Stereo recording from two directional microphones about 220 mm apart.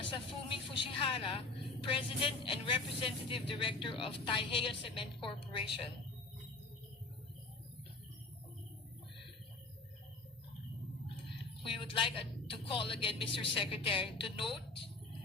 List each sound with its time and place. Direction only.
0.0 s speech: 20° left (ahead or behind)
11.6 s speech: 25° left (ahead or behind)